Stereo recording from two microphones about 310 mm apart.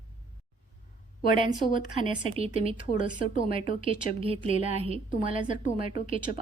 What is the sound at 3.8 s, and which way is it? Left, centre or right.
A woman's voice, centre.